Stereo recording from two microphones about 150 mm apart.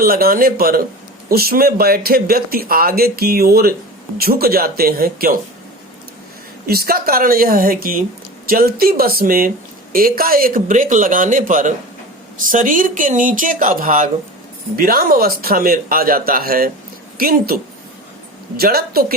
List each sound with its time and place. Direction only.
0.0 s speech: 75° right (ahead or behind)
6.7 s a man's voice: 85° right
18.5 s speech: 90° right